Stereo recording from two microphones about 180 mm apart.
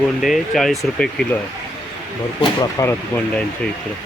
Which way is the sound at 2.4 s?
20° left (ahead or behind).